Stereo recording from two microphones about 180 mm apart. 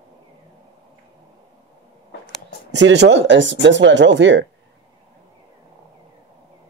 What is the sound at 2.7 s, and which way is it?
Speech, 75° right (ahead or behind).